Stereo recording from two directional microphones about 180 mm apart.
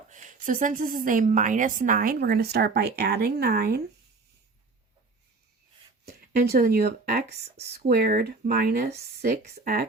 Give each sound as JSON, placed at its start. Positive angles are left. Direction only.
{"t": 0.1, "sound": "a woman's voice", "side_deg": -45}
{"t": 6.1, "sound": "speech", "side_deg": -60}